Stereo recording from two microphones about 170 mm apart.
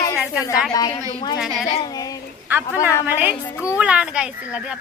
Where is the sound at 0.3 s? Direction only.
20° left (ahead or behind).